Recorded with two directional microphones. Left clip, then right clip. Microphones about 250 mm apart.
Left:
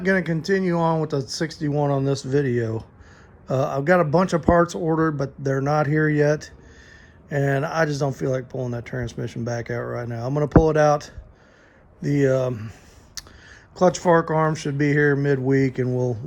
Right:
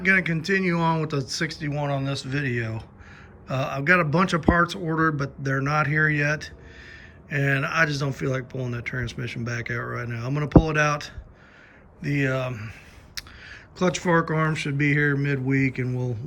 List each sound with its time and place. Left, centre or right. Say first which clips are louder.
0.0 s speech: right 1 dB; centre